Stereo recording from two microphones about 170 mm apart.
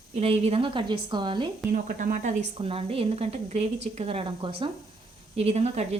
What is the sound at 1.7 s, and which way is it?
Speech, 55° right (ahead or behind).